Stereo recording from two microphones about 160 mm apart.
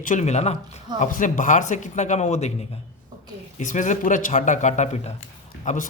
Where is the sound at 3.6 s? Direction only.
50° left (ahead or behind).